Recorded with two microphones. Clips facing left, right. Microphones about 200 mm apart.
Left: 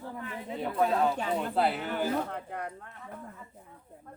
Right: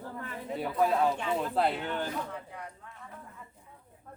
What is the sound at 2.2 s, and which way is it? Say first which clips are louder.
Speech: left 5 dB; 60° left (ahead or behind).